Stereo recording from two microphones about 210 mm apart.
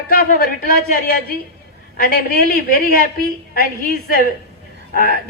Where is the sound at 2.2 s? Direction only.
45° left (ahead or behind).